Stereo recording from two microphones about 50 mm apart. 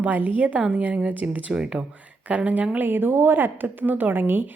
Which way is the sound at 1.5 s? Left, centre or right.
Centre.